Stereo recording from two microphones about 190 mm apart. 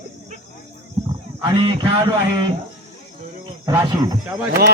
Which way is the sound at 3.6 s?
20° right (ahead or behind).